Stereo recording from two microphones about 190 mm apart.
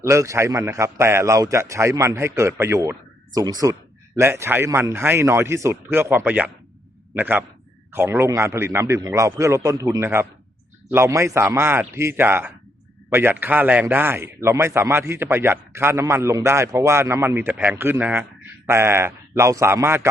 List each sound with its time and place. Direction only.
0.0 s a man's voice: 15° right (ahead or behind)